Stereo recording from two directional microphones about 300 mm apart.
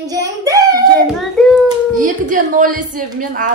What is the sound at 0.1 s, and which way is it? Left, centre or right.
A child's voice, centre.